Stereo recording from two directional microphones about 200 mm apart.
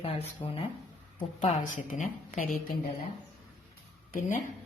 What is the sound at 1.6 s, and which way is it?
Speech, 45° left (ahead or behind).